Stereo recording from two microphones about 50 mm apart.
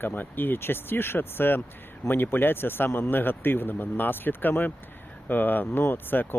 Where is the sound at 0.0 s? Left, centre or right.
Left.